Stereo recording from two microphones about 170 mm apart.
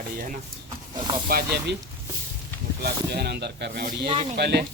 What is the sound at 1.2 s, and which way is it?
Speech, 65° right (ahead or behind).